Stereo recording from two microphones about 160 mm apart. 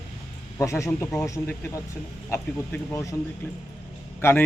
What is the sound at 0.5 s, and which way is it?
Speech, 15° left (ahead or behind).